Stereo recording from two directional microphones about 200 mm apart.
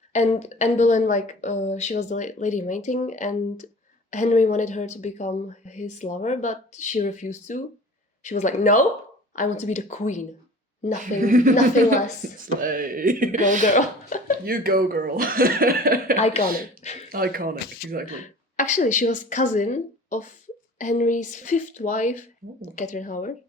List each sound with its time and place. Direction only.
0.1 s a woman's voice: 35° left (ahead or behind)
11.2 s speech: 40° right (ahead or behind)
13.6 s speech: 40° left (ahead or behind)
14.4 s speech: 50° right (ahead or behind)
16.1 s a woman's voice: 30° left (ahead or behind)
17.1 s speech: 45° right (ahead or behind)
18.1 s a woman's voice: 35° left (ahead or behind)